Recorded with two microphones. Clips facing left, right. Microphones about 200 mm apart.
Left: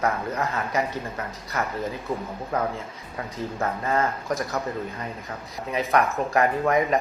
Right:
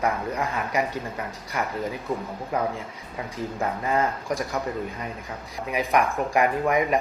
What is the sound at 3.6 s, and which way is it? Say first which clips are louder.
Speech: even; 15° right (ahead or behind).